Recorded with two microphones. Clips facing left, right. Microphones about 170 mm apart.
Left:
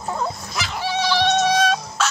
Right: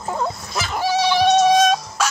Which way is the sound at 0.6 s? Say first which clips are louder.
Right 5 dB; 45° right (ahead or behind).